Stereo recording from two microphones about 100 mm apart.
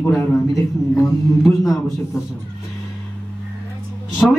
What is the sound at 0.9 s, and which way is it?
Mantra, 30° left (ahead or behind).